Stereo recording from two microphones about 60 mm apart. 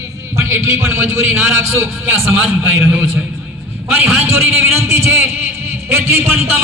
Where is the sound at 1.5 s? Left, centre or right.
Right.